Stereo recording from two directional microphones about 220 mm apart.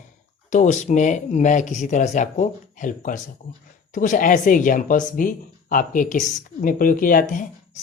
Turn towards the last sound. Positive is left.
turn(degrees=40)  # may be behind; listen again after turning